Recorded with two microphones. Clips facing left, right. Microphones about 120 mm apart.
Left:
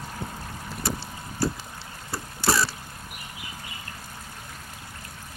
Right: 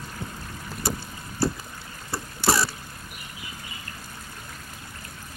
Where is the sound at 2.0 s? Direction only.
30° right (ahead or behind).